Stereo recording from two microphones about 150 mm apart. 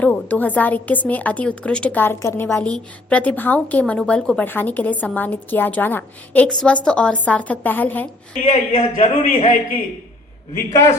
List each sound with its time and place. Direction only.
0.0 s a woman's voice: 10° left (ahead or behind)
2.6 s a woman's voice: 5° left (ahead or behind)
8.4 s a man's voice: 60° left (ahead or behind)
10.5 s a man's voice: 20° left (ahead or behind)